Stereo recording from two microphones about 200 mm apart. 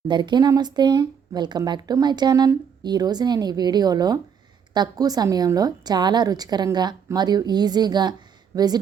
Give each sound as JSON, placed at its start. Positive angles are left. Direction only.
{"t": 0.1, "sound": "speech", "side_deg": -20}